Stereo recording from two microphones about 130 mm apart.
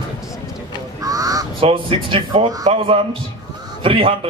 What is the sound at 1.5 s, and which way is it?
A man's voice, 45° right (ahead or behind).